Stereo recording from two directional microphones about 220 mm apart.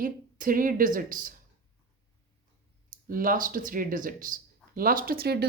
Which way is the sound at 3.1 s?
40° right (ahead or behind).